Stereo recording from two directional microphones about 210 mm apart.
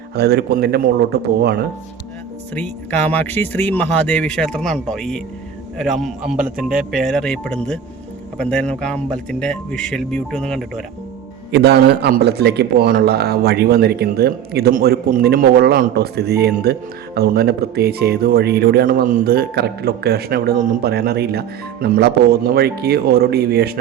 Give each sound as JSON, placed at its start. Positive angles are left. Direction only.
{"t": 0.1, "sound": "speech", "side_deg": -50}
{"t": 2.6, "sound": "speech", "side_deg": 5}
{"t": 11.5, "sound": "speech", "side_deg": -50}